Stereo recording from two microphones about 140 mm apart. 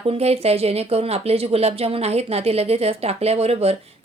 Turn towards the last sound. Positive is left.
turn(degrees=-45)  # may be behind; listen again after turning